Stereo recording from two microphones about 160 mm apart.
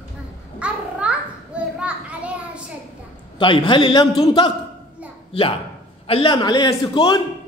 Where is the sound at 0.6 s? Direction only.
5° right (ahead or behind).